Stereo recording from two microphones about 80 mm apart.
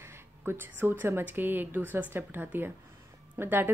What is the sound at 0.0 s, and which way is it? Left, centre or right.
Speech, right.